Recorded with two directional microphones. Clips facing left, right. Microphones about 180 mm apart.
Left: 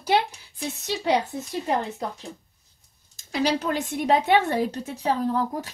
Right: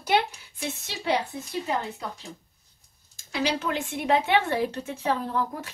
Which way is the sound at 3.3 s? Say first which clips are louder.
Left 3 dB; 40° left (ahead or behind).